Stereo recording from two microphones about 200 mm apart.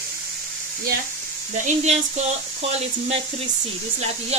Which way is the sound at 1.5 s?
35° right (ahead or behind).